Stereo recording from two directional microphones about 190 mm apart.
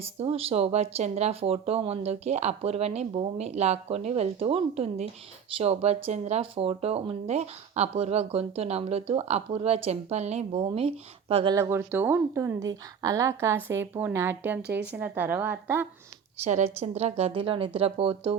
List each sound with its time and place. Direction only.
0.0 s speech: 30° right (ahead or behind)
11.5 s a woman's voice: 15° right (ahead or behind)
16.4 s speech: 35° right (ahead or behind)